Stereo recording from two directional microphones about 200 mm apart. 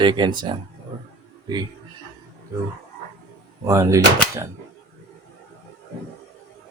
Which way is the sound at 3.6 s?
15° right (ahead or behind).